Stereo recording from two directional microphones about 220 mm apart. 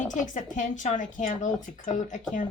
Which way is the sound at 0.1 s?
35° left (ahead or behind).